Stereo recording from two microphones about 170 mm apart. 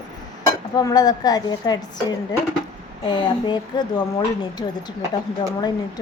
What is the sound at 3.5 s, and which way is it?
A woman's voice, 25° left (ahead or behind).